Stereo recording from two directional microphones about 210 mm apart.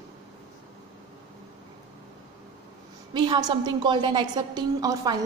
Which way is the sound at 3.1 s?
20° right (ahead or behind).